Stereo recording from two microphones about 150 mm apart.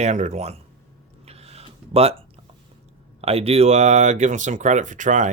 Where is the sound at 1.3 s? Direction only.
45° right (ahead or behind).